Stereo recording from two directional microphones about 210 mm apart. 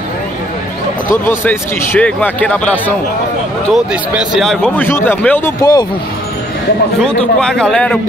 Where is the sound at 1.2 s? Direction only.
10° left (ahead or behind).